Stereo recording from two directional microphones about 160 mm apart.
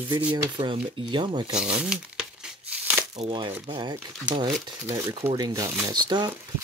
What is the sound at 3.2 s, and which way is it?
Speech, 35° right (ahead or behind).